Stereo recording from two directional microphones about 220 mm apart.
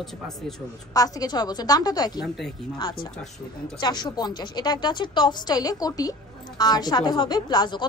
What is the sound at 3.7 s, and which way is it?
A woman's voice, 20° left (ahead or behind).